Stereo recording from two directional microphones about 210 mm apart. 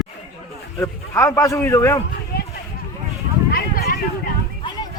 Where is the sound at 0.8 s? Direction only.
15° left (ahead or behind).